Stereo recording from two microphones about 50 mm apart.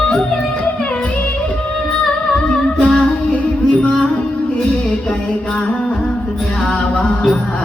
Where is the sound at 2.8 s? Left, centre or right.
Centre.